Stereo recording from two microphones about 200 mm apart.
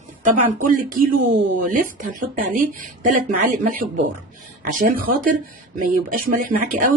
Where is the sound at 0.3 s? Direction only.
40° right (ahead or behind).